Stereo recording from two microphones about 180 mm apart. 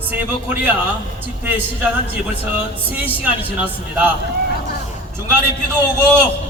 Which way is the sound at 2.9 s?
10° right (ahead or behind).